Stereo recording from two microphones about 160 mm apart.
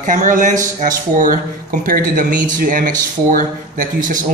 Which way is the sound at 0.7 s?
55° right (ahead or behind).